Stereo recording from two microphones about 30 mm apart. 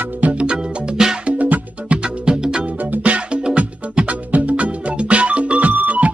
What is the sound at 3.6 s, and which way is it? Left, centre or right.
Music, right.